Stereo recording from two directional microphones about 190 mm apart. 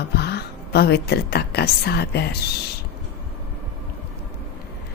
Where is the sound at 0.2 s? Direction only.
60° left (ahead or behind).